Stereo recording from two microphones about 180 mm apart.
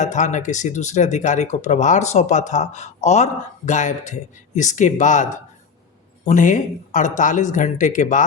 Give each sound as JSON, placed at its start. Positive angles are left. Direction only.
{"t": 0.0, "sound": "speech", "side_deg": 40}